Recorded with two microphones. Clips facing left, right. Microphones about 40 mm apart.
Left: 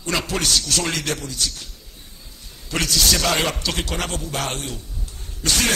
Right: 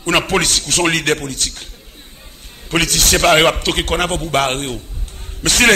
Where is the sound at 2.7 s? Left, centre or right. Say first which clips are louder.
Right 5 dB; right.